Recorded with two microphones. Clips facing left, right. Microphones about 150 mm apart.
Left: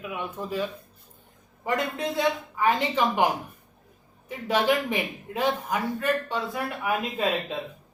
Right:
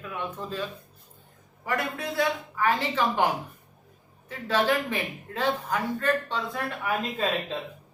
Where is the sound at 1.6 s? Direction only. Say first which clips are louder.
Left 3 dB; 20° left (ahead or behind).